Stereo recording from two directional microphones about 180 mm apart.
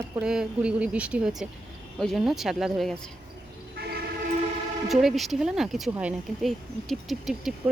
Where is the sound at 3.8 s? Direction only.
60° right (ahead or behind).